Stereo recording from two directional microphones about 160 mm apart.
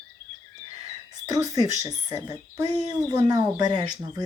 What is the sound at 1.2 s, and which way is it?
Speech, 25° right (ahead or behind).